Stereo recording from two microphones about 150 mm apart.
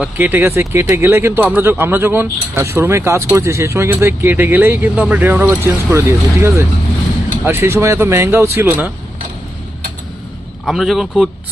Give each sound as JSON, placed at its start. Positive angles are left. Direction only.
{"t": 0.0, "sound": "speech", "side_deg": -15}
{"t": 10.7, "sound": "a man's voice", "side_deg": 0}